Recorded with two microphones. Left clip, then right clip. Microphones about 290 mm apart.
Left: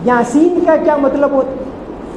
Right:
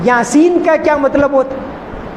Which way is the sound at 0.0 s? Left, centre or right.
Right.